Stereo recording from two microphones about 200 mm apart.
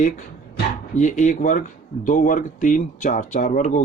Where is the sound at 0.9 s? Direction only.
40° left (ahead or behind).